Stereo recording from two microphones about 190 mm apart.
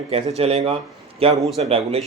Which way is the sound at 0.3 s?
30° right (ahead or behind).